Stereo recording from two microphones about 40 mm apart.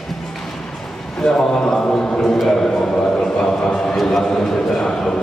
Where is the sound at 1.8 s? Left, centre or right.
Left.